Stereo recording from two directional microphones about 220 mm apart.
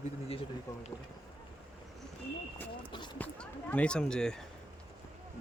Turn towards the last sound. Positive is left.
turn(degrees=5)  # may be behind; listen again after turning